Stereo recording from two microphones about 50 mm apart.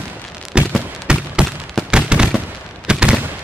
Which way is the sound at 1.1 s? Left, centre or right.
Centre.